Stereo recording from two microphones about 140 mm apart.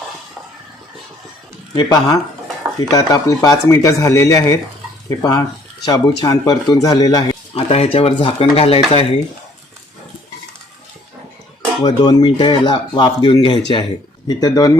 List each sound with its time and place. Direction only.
1.7 s speech: 30° left (ahead or behind)
7.5 s speech: 45° left (ahead or behind)
11.8 s speech: 30° left (ahead or behind)